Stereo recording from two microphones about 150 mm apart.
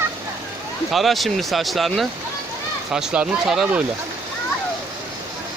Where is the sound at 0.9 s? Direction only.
Centre (ahead or behind).